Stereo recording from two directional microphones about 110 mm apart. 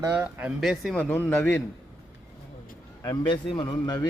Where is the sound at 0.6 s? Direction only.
5° right (ahead or behind).